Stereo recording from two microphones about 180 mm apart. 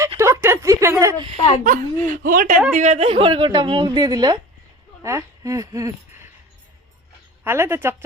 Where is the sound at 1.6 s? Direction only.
50° right (ahead or behind); by 5.9 s 20° right (ahead or behind).